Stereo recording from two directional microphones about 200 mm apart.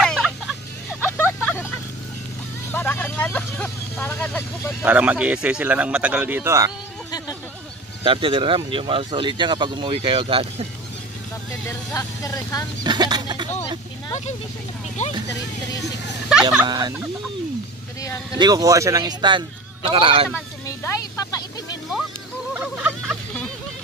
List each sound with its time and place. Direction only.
0.0 s vehicle: centre (ahead or behind)
2.7 s vehicle: 10° left (ahead or behind)
4.8 s speech: 5° right (ahead or behind)
8.0 s speech: 25° right (ahead or behind)
11.6 s speech: 15° left (ahead or behind)
12.8 s speech: 20° right (ahead or behind)
15.0 s speech: 35° left (ahead or behind)
16.6 s speech: 20° right (ahead or behind)
18.0 s vehicle: 15° left (ahead or behind)
18.4 s speech: 15° right (ahead or behind)
20.6 s a sound: 15° left (ahead or behind)
22.5 s a sound: 5° right (ahead or behind)